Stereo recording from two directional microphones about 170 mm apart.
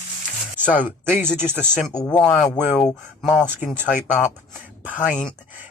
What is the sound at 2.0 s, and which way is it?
Speech, 5° left (ahead or behind).